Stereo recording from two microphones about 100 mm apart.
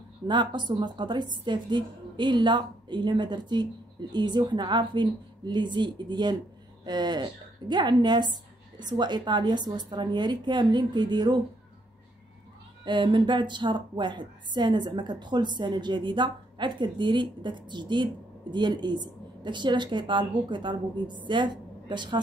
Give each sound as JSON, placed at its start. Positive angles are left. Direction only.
{"t": 0.3, "sound": "a woman's voice", "side_deg": -50}
{"t": 12.8, "sound": "a woman's voice", "side_deg": -50}